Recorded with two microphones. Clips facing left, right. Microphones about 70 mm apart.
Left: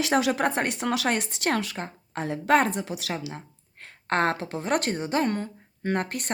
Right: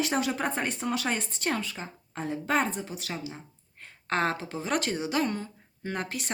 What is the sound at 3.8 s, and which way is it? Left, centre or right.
A woman's voice, left.